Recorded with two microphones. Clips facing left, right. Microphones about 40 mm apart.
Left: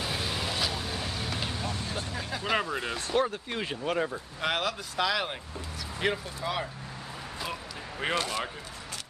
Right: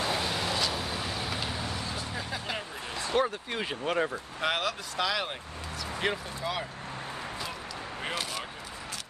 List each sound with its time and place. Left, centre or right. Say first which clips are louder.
0.0 s vehicle: right 2 dB; centre
2.5 s a sound: left 7 dB; left
3.2 s speech: even; centre
8.1 s speech: left 6 dB; centre